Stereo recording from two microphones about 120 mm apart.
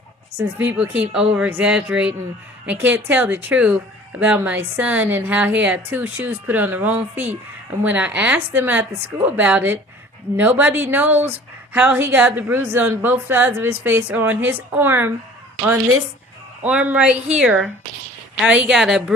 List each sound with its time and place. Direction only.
0.3 s a woman's voice: 15° right (ahead or behind)
16.6 s a woman's voice: 10° right (ahead or behind)